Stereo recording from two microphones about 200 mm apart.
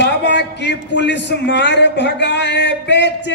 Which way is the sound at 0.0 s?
60° left (ahead or behind).